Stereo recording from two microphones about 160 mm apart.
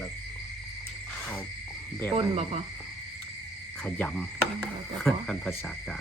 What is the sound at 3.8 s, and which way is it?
Speech, 10° left (ahead or behind).